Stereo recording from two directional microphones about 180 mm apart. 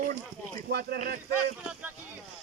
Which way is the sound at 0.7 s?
60° right (ahead or behind).